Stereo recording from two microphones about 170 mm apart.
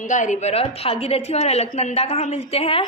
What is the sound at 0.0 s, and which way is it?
A woman's voice, 50° left (ahead or behind).